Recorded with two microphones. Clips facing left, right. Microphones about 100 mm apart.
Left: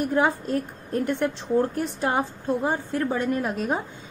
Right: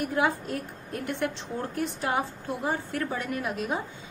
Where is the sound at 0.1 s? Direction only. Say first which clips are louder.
Left 4 dB; 40° left (ahead or behind).